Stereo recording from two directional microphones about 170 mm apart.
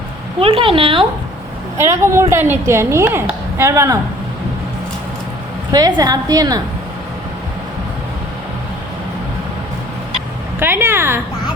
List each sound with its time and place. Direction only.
0.3 s speech: 35° right (ahead or behind)
1.8 s a woman's voice: 15° right (ahead or behind)
5.7 s a woman's voice: 20° right (ahead or behind)
10.6 s a woman's voice: 10° right (ahead or behind)